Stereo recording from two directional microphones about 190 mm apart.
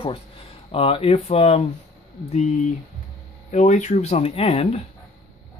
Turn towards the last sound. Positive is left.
turn(degrees=30)  # may be behind; listen again after turning